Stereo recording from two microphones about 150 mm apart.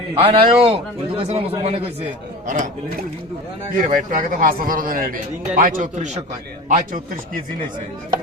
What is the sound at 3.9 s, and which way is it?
Speech, 60° right (ahead or behind).